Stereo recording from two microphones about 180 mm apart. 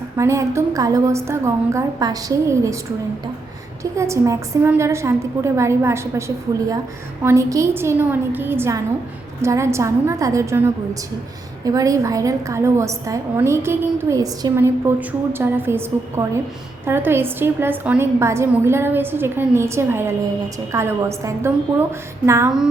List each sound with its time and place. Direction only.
0.2 s a woman's voice: 15° right (ahead or behind)
3.9 s a woman's voice: 15° right (ahead or behind)
11.6 s a woman's voice: 20° right (ahead or behind)